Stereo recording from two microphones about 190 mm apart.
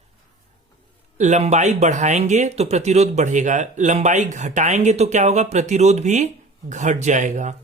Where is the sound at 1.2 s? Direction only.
35° right (ahead or behind).